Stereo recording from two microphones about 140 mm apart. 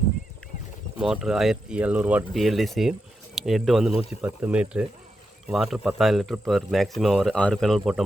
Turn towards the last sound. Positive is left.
turn(degrees=0)  # may be behind; listen again after turning